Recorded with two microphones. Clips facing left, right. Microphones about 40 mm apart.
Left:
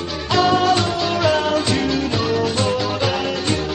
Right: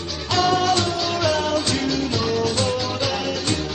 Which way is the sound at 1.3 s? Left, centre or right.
Left.